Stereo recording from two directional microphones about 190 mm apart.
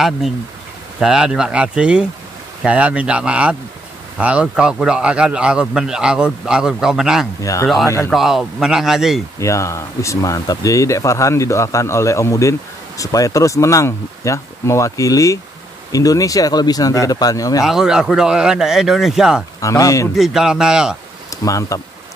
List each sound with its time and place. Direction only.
0.9 s speech: 5° right (ahead or behind)
9.4 s speech: 15° left (ahead or behind)
17.6 s speech: 5° right (ahead or behind)
19.6 s speech: 15° left (ahead or behind)
20.2 s speech: 5° right (ahead or behind)
21.3 s speech: 15° left (ahead or behind)